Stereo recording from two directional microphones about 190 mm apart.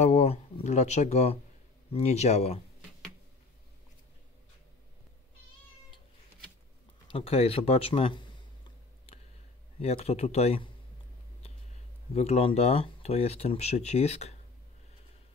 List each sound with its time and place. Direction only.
0.0 s speech: 35° left (ahead or behind)
7.1 s a sound: 30° left (ahead or behind)
9.8 s speech: 35° left (ahead or behind)
12.1 s speech: 35° left (ahead or behind)